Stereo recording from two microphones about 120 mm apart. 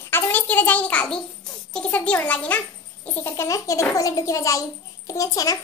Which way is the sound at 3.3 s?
25° left (ahead or behind).